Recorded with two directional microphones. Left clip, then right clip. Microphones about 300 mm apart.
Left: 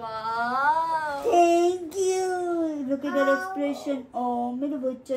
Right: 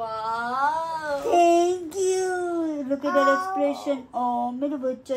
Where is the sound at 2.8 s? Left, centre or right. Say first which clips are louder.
Right 4 dB; centre.